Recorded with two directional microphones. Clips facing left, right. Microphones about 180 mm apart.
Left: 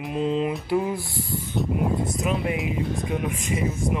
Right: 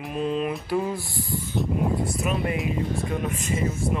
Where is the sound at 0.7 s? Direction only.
15° left (ahead or behind).